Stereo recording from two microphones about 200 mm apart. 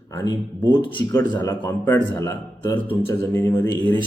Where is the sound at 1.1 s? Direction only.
15° left (ahead or behind).